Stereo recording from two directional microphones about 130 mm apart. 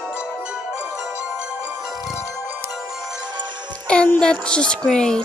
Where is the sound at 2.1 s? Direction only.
25° left (ahead or behind).